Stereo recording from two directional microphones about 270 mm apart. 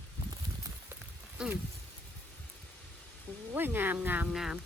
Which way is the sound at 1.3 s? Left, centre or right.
Centre.